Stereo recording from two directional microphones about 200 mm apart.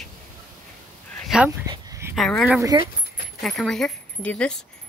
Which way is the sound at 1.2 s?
Centre (ahead or behind).